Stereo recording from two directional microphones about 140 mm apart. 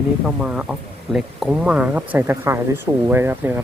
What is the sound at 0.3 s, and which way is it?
Speech, 5° right (ahead or behind).